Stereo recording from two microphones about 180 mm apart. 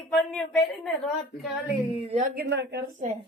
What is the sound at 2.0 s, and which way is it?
Speech, 35° right (ahead or behind).